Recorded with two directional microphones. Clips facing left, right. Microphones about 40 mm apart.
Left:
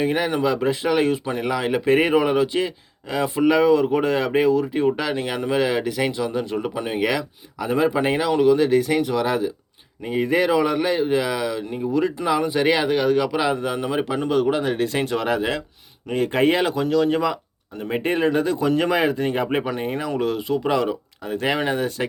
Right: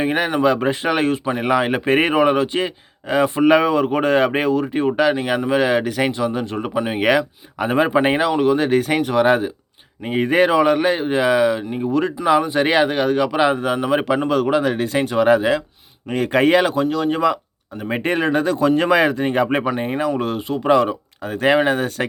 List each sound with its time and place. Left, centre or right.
0.0 s speech: right
5.1 s speech: centre
14.3 s a man's voice: right
15.0 s speech: right
16.1 s speech: right
16.9 s speech: right
18.0 s a man's voice: right
19.6 s speech: centre
20.1 s speech: right